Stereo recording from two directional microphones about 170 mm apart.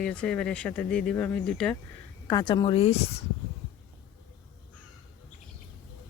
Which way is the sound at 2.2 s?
20° left (ahead or behind).